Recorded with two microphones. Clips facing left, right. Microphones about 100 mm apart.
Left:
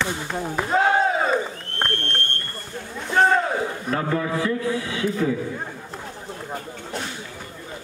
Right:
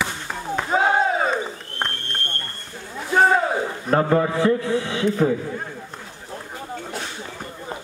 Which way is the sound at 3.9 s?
40° right (ahead or behind).